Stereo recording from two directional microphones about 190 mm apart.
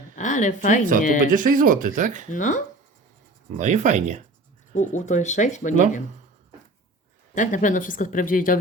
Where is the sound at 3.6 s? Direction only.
40° right (ahead or behind).